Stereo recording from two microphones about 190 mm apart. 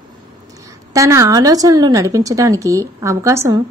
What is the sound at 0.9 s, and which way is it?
A woman's voice, 15° right (ahead or behind).